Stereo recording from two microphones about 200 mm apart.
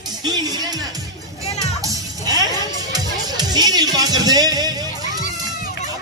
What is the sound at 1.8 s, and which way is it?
Music, 15° right (ahead or behind).